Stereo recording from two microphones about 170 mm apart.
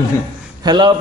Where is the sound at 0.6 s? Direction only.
25° right (ahead or behind).